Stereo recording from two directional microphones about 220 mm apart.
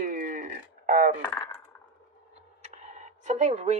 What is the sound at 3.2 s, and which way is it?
Speech, 30° right (ahead or behind).